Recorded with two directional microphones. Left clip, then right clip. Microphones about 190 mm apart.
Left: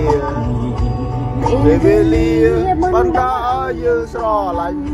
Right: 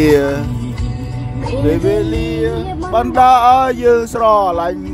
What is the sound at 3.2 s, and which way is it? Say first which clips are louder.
Speech: right 8 dB; 50° right (ahead or behind).